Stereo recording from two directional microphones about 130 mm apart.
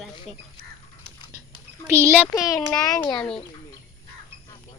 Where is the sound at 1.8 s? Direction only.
20° right (ahead or behind).